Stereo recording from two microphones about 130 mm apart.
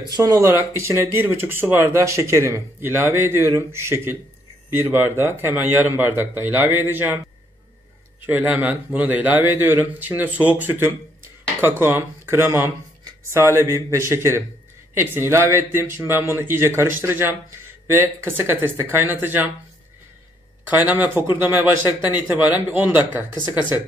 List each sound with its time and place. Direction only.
0.1 s a man's voice: 25° right (ahead or behind)
8.3 s a man's voice: 10° right (ahead or behind)
20.7 s a man's voice: 10° right (ahead or behind)